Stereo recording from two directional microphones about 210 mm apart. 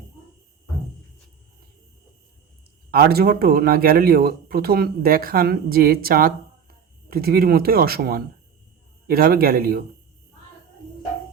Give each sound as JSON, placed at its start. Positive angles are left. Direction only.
{"t": 2.9, "sound": "speech", "side_deg": -45}